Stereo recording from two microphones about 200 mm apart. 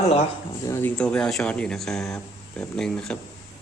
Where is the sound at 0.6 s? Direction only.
10° left (ahead or behind).